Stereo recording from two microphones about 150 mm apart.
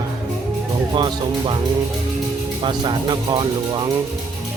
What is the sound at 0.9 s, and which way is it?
Speech, 30° right (ahead or behind).